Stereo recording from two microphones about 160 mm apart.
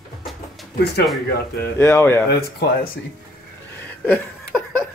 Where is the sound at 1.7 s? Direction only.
15° left (ahead or behind).